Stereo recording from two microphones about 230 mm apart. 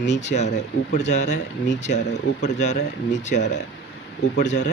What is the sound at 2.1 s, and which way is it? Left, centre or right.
Speech, left.